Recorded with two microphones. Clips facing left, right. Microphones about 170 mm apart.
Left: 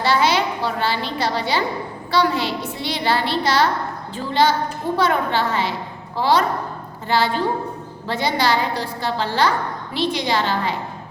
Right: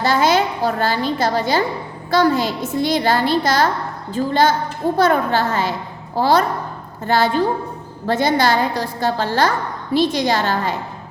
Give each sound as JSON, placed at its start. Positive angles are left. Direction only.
{"t": 0.0, "sound": "a woman's voice", "side_deg": -45}